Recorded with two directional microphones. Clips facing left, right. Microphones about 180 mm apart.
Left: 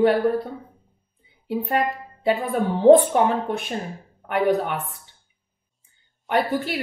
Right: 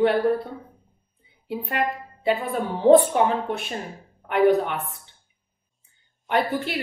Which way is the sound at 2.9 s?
45° left (ahead or behind).